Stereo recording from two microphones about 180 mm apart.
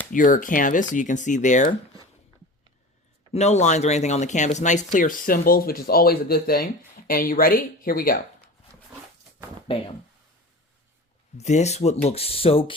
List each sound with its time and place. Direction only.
0.1 s speech: 45° left (ahead or behind)
3.3 s speech: 40° left (ahead or behind); by 8.2 s 55° left (ahead or behind)
9.6 s speech: 30° left (ahead or behind)
11.3 s speech: 40° left (ahead or behind)